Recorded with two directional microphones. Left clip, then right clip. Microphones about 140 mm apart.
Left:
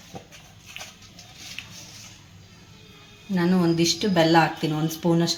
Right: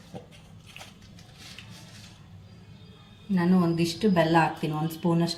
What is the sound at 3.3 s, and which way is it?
Speech, 35° left (ahead or behind).